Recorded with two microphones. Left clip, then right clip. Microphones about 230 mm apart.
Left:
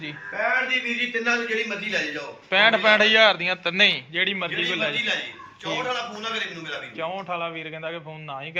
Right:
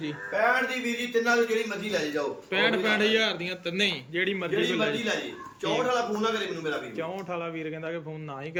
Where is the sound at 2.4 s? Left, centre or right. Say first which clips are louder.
Left 9 dB; centre.